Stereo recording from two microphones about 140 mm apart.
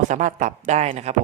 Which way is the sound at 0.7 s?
55° right (ahead or behind).